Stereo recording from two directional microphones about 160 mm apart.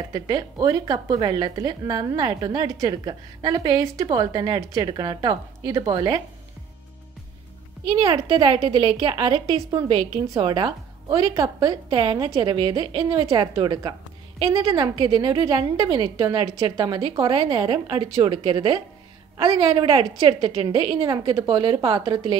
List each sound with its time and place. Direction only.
0.1 s a woman's voice: 25° right (ahead or behind)
7.9 s a woman's voice: 30° right (ahead or behind)